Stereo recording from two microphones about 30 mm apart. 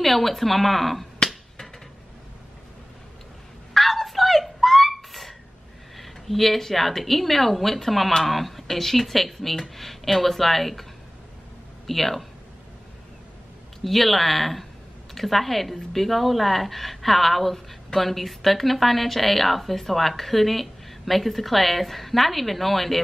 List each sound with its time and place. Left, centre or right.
0.0 s a woman's voice: centre
3.7 s a sound: centre
5.9 s a woman's voice: centre
11.9 s a woman's voice: centre
13.8 s a woman's voice: centre